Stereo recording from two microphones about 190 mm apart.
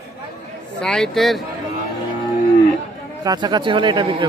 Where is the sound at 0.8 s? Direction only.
5° left (ahead or behind).